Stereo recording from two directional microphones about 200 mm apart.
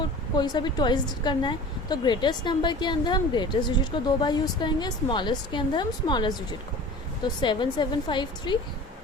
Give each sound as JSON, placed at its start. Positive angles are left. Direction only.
{"t": 0.3, "sound": "a woman's voice", "side_deg": 20}
{"t": 7.4, "sound": "a woman's voice", "side_deg": 25}